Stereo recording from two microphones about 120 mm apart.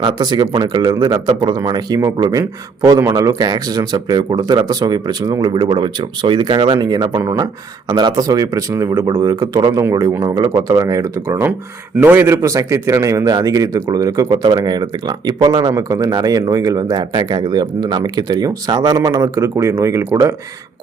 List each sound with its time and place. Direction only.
0.0 s a man's voice: 35° right (ahead or behind)